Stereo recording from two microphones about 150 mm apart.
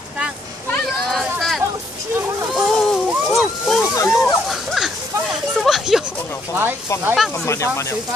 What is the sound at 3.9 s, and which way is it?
Snake, 15° left (ahead or behind).